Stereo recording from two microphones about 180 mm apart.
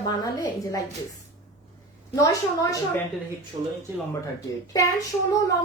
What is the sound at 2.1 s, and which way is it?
Speech, 20° left (ahead or behind).